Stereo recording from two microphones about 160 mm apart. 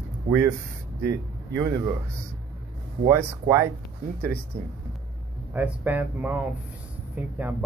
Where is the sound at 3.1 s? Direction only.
20° right (ahead or behind).